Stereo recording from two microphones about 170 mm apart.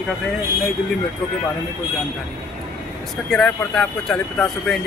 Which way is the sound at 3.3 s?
Centre (ahead or behind).